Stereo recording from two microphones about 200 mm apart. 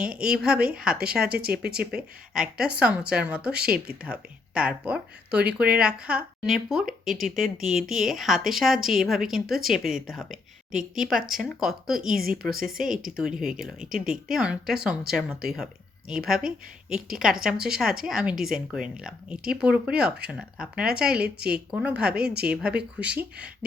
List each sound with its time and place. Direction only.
0.0 s speech: 5° right (ahead or behind)
12.0 s a woman's voice: 45° right (ahead or behind)
12.3 s speech: 5° right (ahead or behind)
21.2 s a woman's voice: 50° right (ahead or behind)
21.7 s speech: 5° right (ahead or behind)